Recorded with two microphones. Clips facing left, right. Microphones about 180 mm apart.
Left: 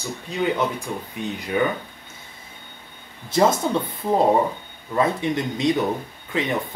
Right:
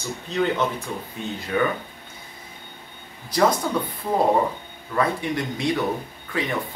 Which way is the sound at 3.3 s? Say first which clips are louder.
Left 2 dB; 25° left (ahead or behind).